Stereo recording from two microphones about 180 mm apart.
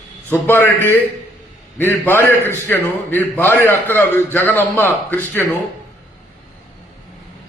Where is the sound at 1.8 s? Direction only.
10° left (ahead or behind).